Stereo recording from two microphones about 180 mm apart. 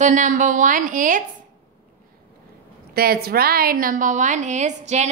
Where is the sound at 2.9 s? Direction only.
60° right (ahead or behind).